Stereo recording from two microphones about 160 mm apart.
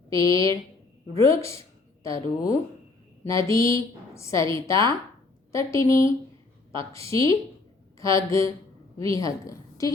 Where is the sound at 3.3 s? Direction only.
20° left (ahead or behind).